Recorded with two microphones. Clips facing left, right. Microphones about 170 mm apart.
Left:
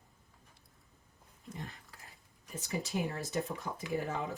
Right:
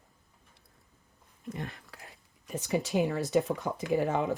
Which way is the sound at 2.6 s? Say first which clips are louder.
Right 8 dB; 70° right (ahead or behind).